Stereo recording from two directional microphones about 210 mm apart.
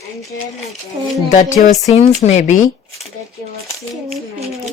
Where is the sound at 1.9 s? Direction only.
30° left (ahead or behind).